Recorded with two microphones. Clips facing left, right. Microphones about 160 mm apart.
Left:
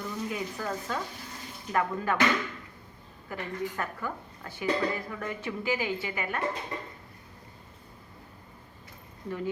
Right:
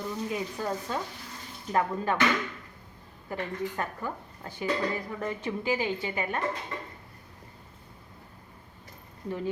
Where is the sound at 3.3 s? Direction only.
30° right (ahead or behind).